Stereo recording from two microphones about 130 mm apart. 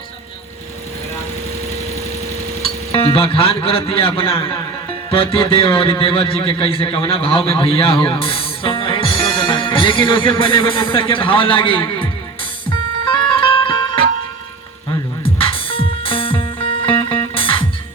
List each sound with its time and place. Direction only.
2.9 s a man's voice: 45° left (ahead or behind)
13.1 s music: 40° left (ahead or behind)
15.2 s music: 45° left (ahead or behind)